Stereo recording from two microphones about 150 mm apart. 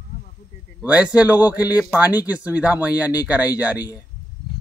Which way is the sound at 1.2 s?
10° right (ahead or behind).